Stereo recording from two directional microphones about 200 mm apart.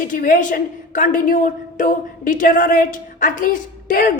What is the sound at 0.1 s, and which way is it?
A woman's voice, 40° left (ahead or behind).